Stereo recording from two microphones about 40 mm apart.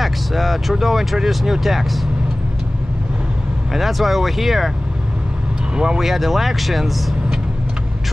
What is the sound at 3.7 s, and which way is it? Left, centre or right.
Speech, centre.